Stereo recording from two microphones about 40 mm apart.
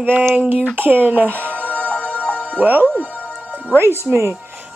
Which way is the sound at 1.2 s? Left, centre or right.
Right.